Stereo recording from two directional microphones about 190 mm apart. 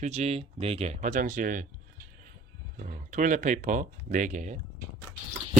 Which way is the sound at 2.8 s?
45° right (ahead or behind).